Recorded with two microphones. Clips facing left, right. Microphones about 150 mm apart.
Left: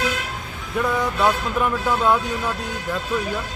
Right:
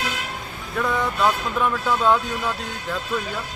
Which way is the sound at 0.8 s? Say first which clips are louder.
Left 1 dB; 10° left (ahead or behind).